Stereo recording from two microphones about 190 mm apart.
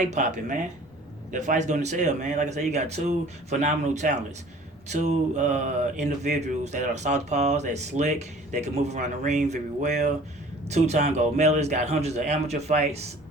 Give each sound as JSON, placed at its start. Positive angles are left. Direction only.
{"t": 0.0, "sound": "speech", "side_deg": -40}